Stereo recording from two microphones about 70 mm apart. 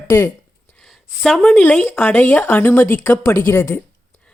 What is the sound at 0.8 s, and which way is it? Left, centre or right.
Speech, centre.